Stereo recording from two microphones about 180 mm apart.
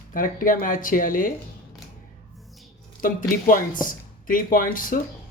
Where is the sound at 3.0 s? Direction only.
50° left (ahead or behind).